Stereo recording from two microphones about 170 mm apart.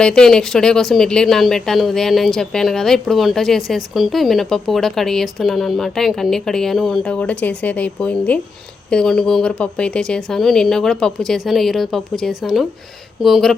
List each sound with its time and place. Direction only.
0.0 s speech: 5° left (ahead or behind)